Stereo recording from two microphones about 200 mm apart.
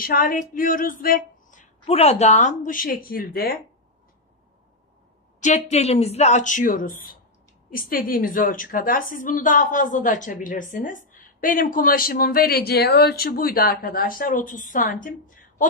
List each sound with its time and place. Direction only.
0.0 s a woman's voice: 45° left (ahead or behind)
5.7 s a woman's voice: 30° left (ahead or behind)